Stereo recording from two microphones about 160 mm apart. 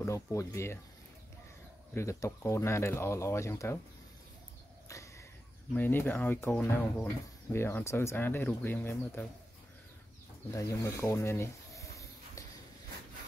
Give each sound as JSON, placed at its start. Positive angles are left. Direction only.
{"t": 0.0, "sound": "speech", "side_deg": 20}
{"t": 2.0, "sound": "speech", "side_deg": 15}
{"t": 4.8, "sound": "a sound", "side_deg": 20}
{"t": 5.7, "sound": "speech", "side_deg": 10}
{"t": 10.5, "sound": "snake", "side_deg": 20}